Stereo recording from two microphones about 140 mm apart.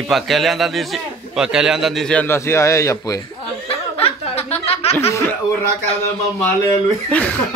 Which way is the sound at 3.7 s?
45° left (ahead or behind).